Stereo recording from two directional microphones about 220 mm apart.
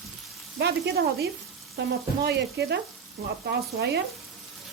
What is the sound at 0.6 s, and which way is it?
Speech, 45° right (ahead or behind).